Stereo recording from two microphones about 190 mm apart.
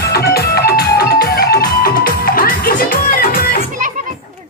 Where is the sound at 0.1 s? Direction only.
55° left (ahead or behind).